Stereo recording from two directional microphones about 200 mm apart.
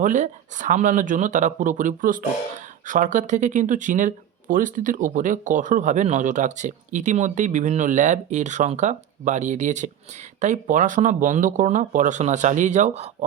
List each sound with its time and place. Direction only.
0.0 s speech: 40° right (ahead or behind)